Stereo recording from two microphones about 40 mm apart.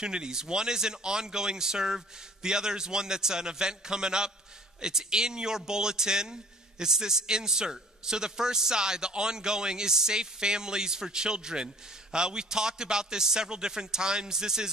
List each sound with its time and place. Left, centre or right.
0.0 s a man's voice: centre